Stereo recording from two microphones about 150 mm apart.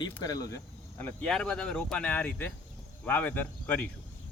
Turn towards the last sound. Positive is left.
turn(degrees=10)  # may be behind; listen again after turning